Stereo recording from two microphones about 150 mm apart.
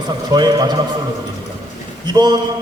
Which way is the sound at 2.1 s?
30° right (ahead or behind).